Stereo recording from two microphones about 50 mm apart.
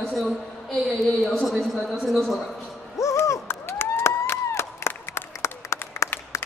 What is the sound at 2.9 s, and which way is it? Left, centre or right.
Owl, left.